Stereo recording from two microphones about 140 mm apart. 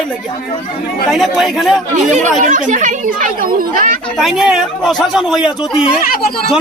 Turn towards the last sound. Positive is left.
turn(degrees=-5)  # may be behind; listen again after turning